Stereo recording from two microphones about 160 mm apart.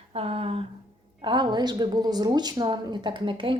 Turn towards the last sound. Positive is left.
turn(degrees=-30)  # may be behind; listen again after turning